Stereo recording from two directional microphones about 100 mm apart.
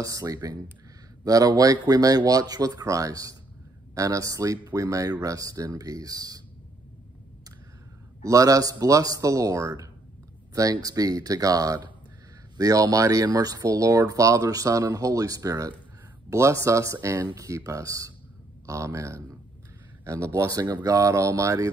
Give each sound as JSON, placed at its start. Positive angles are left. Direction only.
{"t": 0.0, "sound": "speech", "side_deg": -35}
{"t": 8.2, "sound": "speech", "side_deg": -35}